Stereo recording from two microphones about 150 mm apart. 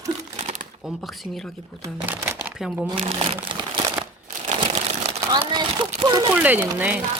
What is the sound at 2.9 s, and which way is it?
Speech, 35° right (ahead or behind).